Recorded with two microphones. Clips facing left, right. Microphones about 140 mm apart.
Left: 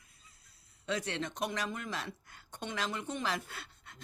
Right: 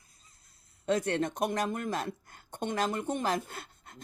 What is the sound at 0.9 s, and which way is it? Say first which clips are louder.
Speech: right 7 dB; 50° right (ahead or behind).